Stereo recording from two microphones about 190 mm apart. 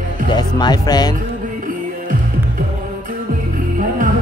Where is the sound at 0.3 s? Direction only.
20° left (ahead or behind).